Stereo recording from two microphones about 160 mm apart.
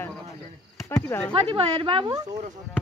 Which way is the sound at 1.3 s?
35° right (ahead or behind).